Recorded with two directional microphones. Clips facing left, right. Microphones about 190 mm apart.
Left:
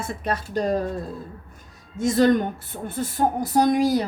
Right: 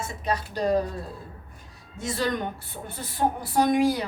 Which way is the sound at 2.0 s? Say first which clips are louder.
Left 9 dB; 45° left (ahead or behind).